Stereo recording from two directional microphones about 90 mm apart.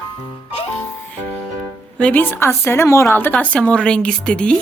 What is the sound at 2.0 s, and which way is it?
A woman's voice, 15° left (ahead or behind).